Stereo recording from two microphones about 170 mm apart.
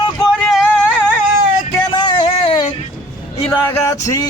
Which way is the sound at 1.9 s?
30° left (ahead or behind).